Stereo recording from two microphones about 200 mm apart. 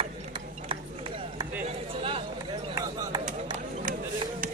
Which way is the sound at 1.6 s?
30° right (ahead or behind).